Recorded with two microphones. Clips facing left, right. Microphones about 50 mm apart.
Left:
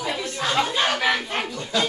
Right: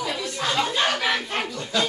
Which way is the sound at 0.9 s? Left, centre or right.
Centre.